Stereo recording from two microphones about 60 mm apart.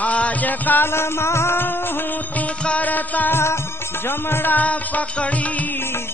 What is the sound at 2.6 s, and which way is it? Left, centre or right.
Music, left.